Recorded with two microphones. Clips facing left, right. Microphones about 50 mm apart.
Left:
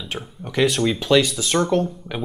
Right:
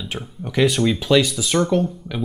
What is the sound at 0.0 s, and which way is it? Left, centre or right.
Speech, centre.